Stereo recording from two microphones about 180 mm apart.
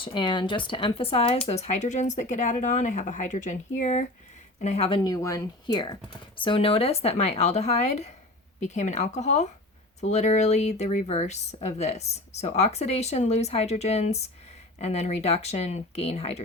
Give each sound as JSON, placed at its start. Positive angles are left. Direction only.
{"t": 0.0, "sound": "speech", "side_deg": 25}
{"t": 5.0, "sound": "speech", "side_deg": 20}